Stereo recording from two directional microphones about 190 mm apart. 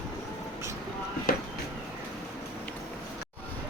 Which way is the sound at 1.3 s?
50° left (ahead or behind).